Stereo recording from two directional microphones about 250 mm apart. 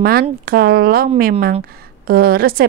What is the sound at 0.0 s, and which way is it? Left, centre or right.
A woman's voice, right.